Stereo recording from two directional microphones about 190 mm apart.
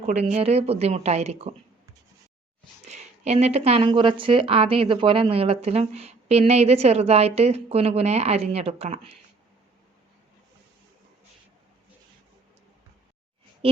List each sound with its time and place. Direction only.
0.0 s speech: 35° right (ahead or behind)
2.9 s speech: 35° right (ahead or behind)